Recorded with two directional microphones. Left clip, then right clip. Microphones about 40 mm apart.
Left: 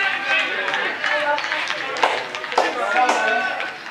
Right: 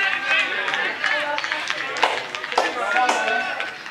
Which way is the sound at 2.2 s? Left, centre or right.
Right.